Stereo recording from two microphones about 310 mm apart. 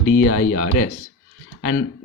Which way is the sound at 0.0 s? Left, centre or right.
Left.